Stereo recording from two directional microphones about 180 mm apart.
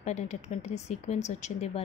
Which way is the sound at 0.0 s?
40° left (ahead or behind).